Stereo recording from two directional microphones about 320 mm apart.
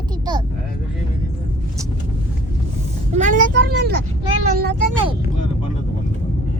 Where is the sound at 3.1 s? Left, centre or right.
Right.